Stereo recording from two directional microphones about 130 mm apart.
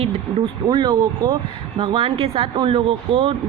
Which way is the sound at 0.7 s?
35° right (ahead or behind).